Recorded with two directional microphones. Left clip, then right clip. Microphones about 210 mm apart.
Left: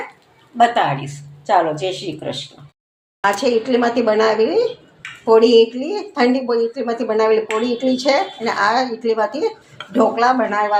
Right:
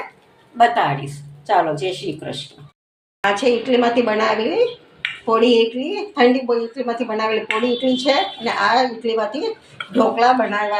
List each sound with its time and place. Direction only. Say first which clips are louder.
0.5 s speech: left 1 dB; 10° left (ahead or behind)